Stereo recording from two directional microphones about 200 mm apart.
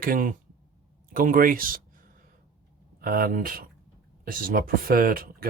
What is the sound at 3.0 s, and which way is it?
Speech, 45° right (ahead or behind).